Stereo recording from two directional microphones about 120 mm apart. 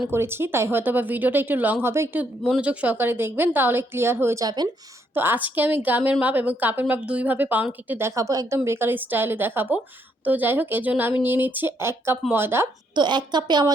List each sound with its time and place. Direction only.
0.1 s a woman's voice: 20° right (ahead or behind)
4.4 s a woman's voice: 35° right (ahead or behind)
5.1 s a woman's voice: 15° right (ahead or behind)
12.9 s a woman's voice: 40° right (ahead or behind)